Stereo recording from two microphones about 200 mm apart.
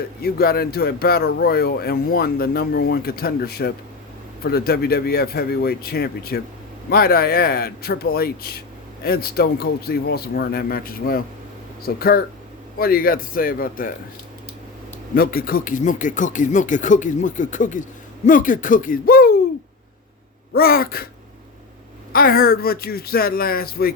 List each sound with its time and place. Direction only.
0.2 s speech: 50° left (ahead or behind)
15.1 s speech: 45° left (ahead or behind)
20.5 s speech: 50° left (ahead or behind)
22.1 s speech: 45° left (ahead or behind)